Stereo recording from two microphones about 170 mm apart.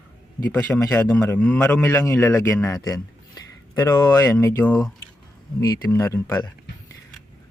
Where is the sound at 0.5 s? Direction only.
20° left (ahead or behind).